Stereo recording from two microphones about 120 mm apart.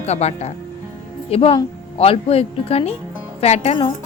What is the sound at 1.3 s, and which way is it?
Cutlery, 50° left (ahead or behind).